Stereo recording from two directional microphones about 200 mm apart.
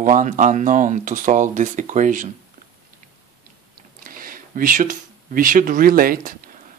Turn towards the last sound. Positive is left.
turn(degrees=-45)  # may be behind; listen again after turning